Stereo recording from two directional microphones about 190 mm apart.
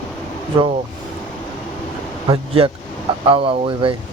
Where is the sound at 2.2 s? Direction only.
25° right (ahead or behind).